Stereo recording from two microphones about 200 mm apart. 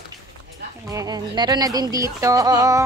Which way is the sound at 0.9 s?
20° right (ahead or behind).